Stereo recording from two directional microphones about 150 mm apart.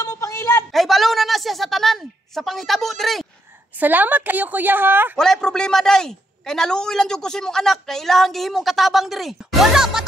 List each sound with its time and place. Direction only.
0.0 s a sound: 20° left (ahead or behind)
0.7 s a man's voice: centre (ahead or behind)
3.8 s a woman's voice: 10° right (ahead or behind)
5.1 s a man's voice: 5° left (ahead or behind)